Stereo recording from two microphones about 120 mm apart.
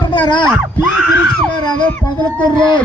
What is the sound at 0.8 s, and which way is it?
Screaming, 5° right (ahead or behind).